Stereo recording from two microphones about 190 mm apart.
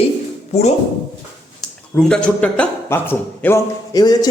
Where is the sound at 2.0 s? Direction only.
5° left (ahead or behind).